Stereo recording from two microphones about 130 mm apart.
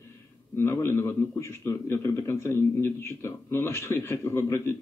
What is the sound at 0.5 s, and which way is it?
A man's voice, 20° left (ahead or behind).